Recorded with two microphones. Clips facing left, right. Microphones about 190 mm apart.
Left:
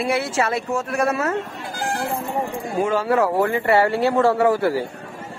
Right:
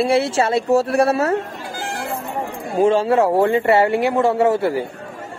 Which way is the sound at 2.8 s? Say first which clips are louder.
Right 4 dB; 30° right (ahead or behind).